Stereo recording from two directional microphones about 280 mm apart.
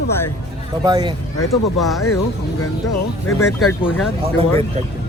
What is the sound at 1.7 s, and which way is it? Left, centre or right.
Speech, centre.